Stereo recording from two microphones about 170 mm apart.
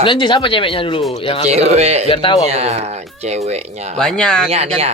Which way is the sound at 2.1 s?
30° left (ahead or behind).